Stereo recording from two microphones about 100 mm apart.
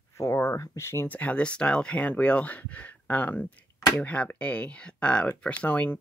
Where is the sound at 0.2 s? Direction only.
30° left (ahead or behind).